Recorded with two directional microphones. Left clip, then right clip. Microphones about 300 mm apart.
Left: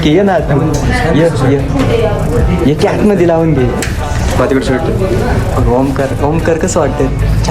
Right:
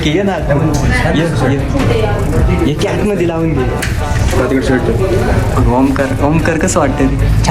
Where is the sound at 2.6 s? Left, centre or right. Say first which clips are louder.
Left 6 dB; left.